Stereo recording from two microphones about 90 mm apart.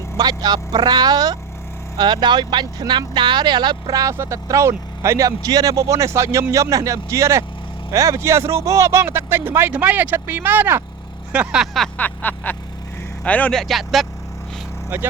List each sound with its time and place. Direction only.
0.2 s speech: 50° right (ahead or behind)
4.1 s speech: 30° right (ahead or behind)
11.3 s speech: 10° right (ahead or behind)
11.9 s vehicle: 20° left (ahead or behind)
13.2 s a man's voice: 15° left (ahead or behind)
13.5 s speech: 5° left (ahead or behind)